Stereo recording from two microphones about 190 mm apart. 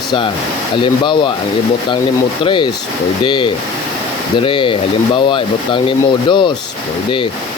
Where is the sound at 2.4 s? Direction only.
25° left (ahead or behind).